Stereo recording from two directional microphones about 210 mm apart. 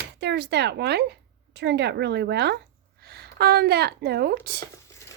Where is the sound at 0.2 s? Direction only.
50° right (ahead or behind).